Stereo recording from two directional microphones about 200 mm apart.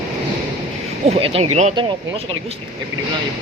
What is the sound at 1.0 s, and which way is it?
Speech, 30° right (ahead or behind).